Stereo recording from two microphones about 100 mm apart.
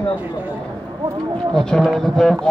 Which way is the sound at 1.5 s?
5° left (ahead or behind).